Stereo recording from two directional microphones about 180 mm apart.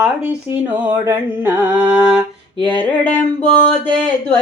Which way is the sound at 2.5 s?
25° right (ahead or behind).